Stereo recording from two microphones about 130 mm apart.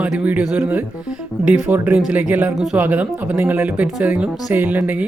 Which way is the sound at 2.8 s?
15° right (ahead or behind).